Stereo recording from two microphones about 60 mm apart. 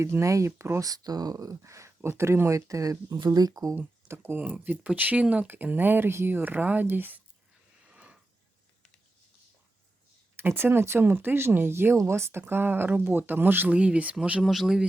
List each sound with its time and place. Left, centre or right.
0.0 s speech: right
0.9 s speech: right
3.8 s speech: right
4.4 s speech: right
7.9 s a sound: right
10.3 s speech: right
13.7 s speech: right
14.4 s a man's voice: centre